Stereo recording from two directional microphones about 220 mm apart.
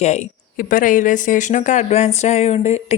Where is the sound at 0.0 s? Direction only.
30° left (ahead or behind).